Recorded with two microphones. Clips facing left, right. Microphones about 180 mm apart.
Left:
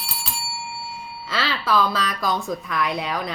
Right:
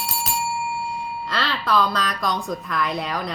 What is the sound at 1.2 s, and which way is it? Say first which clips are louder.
A woman's voice: left 2 dB; centre (ahead or behind).